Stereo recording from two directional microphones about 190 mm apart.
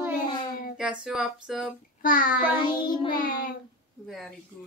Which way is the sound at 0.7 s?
5° right (ahead or behind).